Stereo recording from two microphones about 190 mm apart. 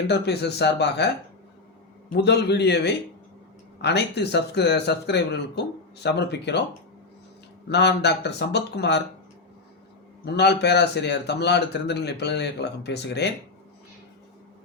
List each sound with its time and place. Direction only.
0.1 s a man's voice: 60° left (ahead or behind)
2.1 s a man's voice: 60° left (ahead or behind)
7.7 s a man's voice: 60° left (ahead or behind)
10.2 s a man's voice: 60° left (ahead or behind)